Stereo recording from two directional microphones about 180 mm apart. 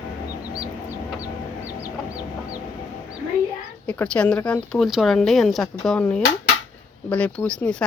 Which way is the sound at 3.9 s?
5° left (ahead or behind).